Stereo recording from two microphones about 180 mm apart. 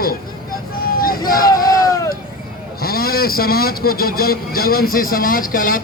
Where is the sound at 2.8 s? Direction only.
55° left (ahead or behind).